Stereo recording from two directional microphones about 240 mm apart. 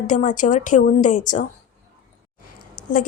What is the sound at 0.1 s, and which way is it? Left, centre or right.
A woman's voice, left.